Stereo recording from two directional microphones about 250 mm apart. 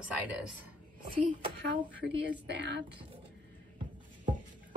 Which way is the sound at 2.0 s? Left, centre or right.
Right.